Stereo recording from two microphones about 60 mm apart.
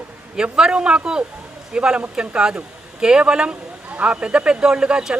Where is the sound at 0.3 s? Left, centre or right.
Centre.